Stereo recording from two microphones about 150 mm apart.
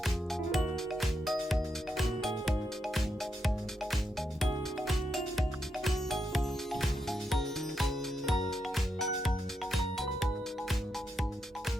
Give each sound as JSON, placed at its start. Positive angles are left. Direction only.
{"t": 0.5, "sound": "music", "side_deg": 0}
{"t": 4.9, "sound": "music", "side_deg": 0}